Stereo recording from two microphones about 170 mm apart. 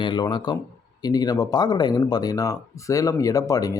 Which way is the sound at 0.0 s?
25° left (ahead or behind).